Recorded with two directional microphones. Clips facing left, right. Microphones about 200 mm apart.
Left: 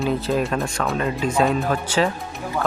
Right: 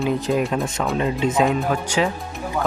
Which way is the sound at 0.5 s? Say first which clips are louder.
Right 1 dB; 20° right (ahead or behind).